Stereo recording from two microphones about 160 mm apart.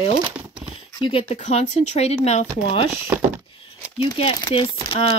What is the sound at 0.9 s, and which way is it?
Speech, 35° left (ahead or behind).